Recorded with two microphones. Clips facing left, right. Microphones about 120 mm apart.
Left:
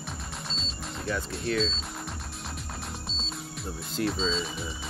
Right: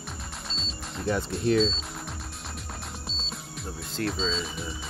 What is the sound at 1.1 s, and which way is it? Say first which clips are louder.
Speech: right 6 dB; 30° right (ahead or behind).